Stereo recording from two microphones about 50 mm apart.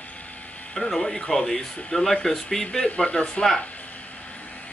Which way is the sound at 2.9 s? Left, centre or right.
Centre.